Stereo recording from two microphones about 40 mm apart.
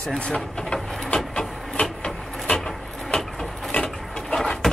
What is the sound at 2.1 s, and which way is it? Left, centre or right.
Vehicle, centre.